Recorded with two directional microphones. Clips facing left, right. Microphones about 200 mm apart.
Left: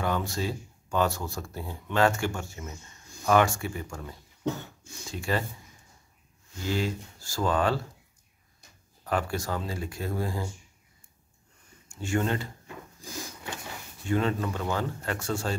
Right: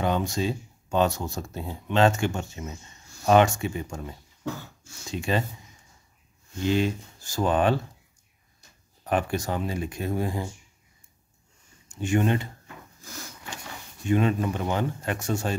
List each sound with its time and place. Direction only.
0.0 s speech: 20° right (ahead or behind)
4.4 s cough: 20° left (ahead or behind)
5.1 s speech: 20° right (ahead or behind)
6.6 s speech: 20° right (ahead or behind)
9.0 s speech: 20° right (ahead or behind)
11.9 s speech: 20° right (ahead or behind)
14.0 s speech: 15° right (ahead or behind)